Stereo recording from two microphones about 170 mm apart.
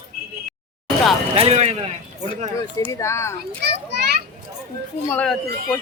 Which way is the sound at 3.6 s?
85° right.